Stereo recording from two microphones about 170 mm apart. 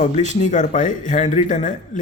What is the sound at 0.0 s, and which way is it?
Speech, 45° left (ahead or behind).